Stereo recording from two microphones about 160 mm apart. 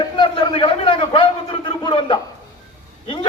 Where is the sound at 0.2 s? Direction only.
30° left (ahead or behind).